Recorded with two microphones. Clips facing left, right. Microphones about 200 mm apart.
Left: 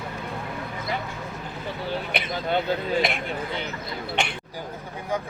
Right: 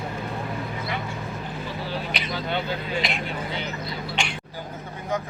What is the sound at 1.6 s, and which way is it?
Vehicle, 55° left (ahead or behind).